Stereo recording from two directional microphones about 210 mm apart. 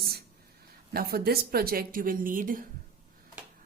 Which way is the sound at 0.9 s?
45° right (ahead or behind).